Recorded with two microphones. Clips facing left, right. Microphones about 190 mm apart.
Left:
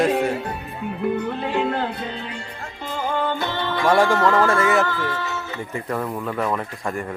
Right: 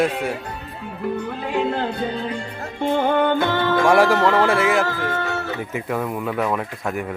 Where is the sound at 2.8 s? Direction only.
60° right (ahead or behind).